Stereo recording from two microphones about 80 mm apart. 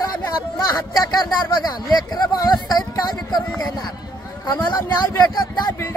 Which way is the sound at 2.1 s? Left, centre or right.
Left.